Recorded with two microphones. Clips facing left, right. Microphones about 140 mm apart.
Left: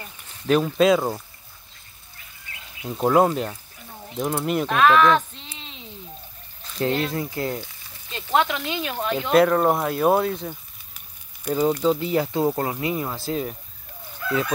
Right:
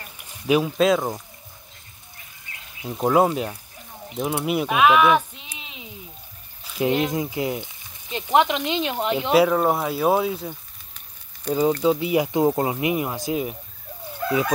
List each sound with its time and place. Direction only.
0.5 s speech: 10° right (ahead or behind)
2.8 s speech: centre (ahead or behind); by 9.3 s 15° right (ahead or behind)
9.3 s speech: 5° right (ahead or behind)
11.5 s speech: 10° left (ahead or behind)
11.8 s speech: 10° right (ahead or behind)